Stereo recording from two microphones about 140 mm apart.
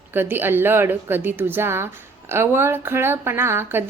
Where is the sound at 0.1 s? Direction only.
15° right (ahead or behind).